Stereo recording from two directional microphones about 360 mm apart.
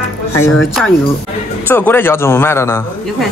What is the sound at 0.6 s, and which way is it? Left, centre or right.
A man's voice, centre.